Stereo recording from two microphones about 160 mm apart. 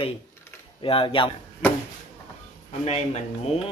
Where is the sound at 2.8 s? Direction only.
40° left (ahead or behind).